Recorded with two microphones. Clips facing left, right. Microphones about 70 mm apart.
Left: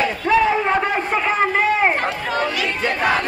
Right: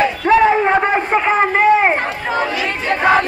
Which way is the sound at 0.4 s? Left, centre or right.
Right.